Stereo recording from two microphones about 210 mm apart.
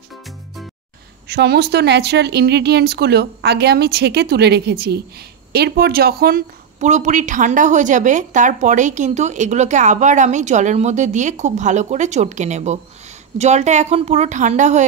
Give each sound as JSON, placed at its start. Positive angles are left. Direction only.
{"t": 1.3, "sound": "speech", "side_deg": -50}